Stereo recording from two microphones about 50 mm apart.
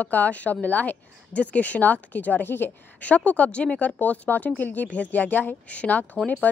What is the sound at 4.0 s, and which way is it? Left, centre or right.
Speech, left.